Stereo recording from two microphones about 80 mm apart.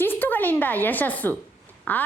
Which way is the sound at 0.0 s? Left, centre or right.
Left.